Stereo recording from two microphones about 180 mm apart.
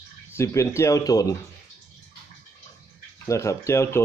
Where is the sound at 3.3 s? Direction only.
15° left (ahead or behind).